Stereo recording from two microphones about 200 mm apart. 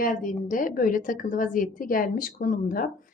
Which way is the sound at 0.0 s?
40° left (ahead or behind).